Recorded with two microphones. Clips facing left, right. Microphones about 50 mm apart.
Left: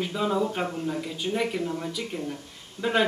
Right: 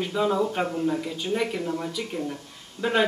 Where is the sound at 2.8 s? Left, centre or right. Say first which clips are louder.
Right 1 dB; left.